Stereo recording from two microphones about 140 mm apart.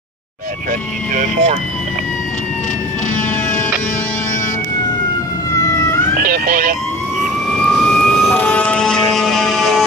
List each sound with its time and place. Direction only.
1.1 s speech: 60° right (ahead or behind)
5.6 s emergency vehicle: 25° left (ahead or behind)
6.1 s speech: 90° right
7.5 s emergency vehicle: 5° left (ahead or behind)